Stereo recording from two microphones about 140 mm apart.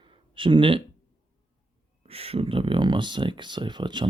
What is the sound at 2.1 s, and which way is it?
Speech, 45° right (ahead or behind).